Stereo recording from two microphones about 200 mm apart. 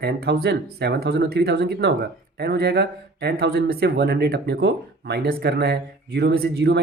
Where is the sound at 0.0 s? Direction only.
55° right (ahead or behind).